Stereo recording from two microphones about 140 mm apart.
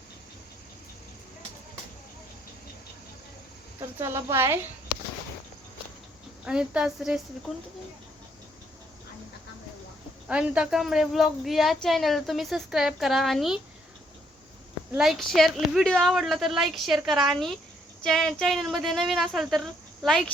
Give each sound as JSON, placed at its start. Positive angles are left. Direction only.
{"t": 3.8, "sound": "speech", "side_deg": -20}
{"t": 6.4, "sound": "a woman's voice", "side_deg": -5}
{"t": 10.2, "sound": "a woman's voice", "side_deg": -10}
{"t": 14.9, "sound": "a woman's voice", "side_deg": 0}